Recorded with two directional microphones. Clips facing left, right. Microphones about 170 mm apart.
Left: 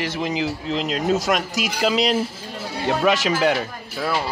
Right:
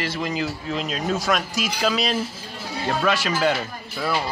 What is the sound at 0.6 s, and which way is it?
Speech, 75° left (ahead or behind).